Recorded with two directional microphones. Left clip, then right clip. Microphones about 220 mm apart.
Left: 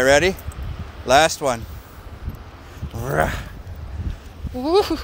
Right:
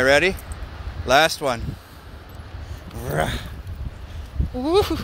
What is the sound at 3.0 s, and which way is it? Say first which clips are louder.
Speech: left 3 dB; 20° left (ahead or behind).